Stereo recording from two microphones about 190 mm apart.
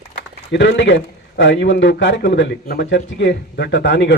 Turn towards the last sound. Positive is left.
turn(degrees=65)  # may be behind; listen again after turning